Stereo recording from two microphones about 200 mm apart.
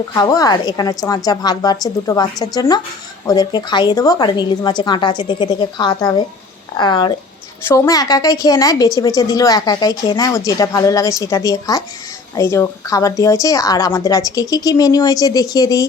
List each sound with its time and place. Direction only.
0.1 s a woman's voice: 20° left (ahead or behind)